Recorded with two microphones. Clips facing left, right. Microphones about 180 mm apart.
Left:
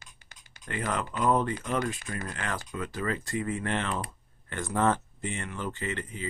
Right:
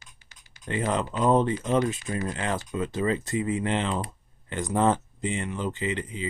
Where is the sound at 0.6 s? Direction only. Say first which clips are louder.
Right 5 dB; 20° right (ahead or behind).